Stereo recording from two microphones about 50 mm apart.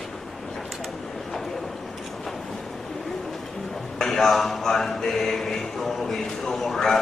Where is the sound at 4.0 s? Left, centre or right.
Centre.